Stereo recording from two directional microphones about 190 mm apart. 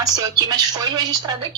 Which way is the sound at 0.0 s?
20° right (ahead or behind).